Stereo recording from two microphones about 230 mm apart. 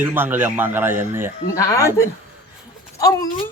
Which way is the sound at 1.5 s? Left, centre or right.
Centre.